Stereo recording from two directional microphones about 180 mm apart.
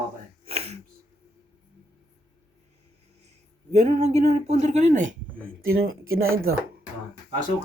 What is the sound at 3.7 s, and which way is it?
Speech, 40° right (ahead or behind).